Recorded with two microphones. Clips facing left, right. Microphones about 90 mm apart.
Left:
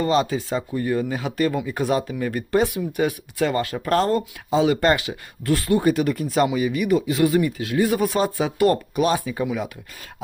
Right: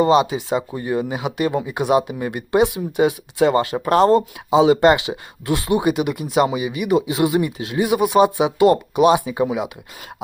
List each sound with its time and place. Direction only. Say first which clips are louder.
0.0 s speech: right 5 dB; 15° right (ahead or behind)